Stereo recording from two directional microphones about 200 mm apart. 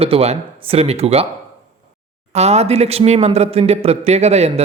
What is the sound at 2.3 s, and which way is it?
A man's voice, 30° right (ahead or behind).